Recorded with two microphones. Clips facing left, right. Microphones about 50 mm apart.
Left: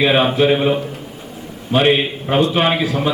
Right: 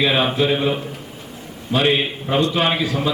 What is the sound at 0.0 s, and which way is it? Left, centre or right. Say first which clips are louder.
Speech: left 4 dB; centre.